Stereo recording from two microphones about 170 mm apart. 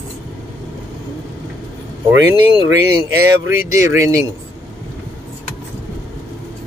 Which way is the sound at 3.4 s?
15° right (ahead or behind).